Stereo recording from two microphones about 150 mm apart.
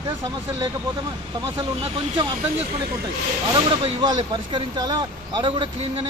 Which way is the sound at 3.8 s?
30° right (ahead or behind).